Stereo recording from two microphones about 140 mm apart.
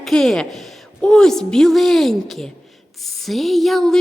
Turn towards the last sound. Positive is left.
turn(degrees=0)  # may be behind; listen again after turning